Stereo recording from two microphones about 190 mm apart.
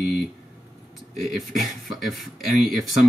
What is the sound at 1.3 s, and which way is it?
Speech, centre (ahead or behind).